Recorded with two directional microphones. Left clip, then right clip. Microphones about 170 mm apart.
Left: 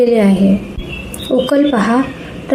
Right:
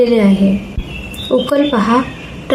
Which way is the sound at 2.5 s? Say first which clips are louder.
Right 1 dB; 20° left (ahead or behind).